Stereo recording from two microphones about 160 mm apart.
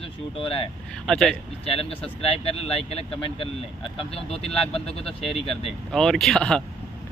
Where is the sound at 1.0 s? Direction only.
Centre (ahead or behind).